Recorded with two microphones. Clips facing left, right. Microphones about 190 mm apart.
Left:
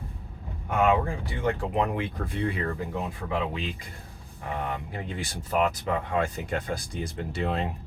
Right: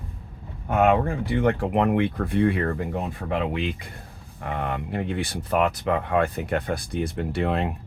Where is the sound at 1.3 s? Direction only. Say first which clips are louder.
Right 5 dB; 65° right (ahead or behind).